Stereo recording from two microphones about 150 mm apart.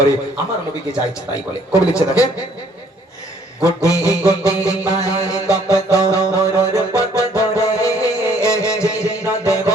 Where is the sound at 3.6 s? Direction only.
20° left (ahead or behind).